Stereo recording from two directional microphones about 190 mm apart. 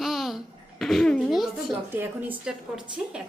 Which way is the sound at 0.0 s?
Centre (ahead or behind).